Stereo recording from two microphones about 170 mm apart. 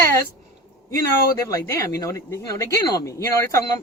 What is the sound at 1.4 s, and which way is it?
Speech, 20° left (ahead or behind).